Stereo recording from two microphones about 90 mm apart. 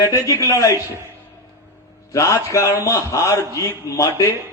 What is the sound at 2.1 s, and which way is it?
A man's voice, 35° left (ahead or behind).